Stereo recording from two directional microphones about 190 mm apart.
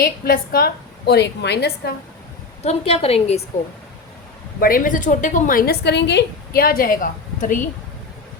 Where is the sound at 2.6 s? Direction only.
35° left (ahead or behind).